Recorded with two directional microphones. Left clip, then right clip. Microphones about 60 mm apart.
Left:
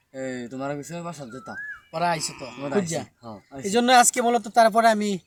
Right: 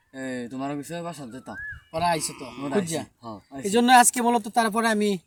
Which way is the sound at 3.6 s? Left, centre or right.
Left.